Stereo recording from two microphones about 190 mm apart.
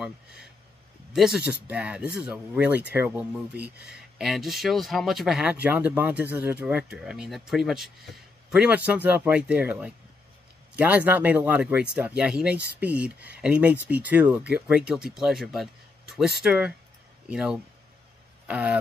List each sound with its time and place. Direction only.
1.1 s speech: centre (ahead or behind)